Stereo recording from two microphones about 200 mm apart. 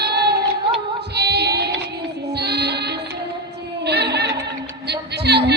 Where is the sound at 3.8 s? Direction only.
55° right (ahead or behind).